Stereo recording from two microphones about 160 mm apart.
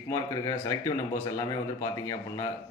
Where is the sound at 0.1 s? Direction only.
20° left (ahead or behind).